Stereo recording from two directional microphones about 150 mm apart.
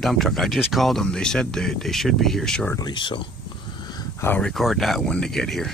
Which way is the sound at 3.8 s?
25° left (ahead or behind).